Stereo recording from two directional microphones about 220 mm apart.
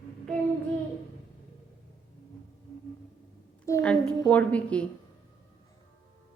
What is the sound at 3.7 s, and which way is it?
Child singing, 10° left (ahead or behind).